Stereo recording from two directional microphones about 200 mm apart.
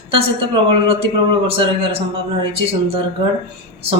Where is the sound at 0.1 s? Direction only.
25° right (ahead or behind).